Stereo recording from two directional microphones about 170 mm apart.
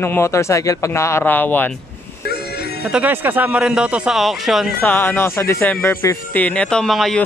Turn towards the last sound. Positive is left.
turn(degrees=0)  # may be behind; listen again after turning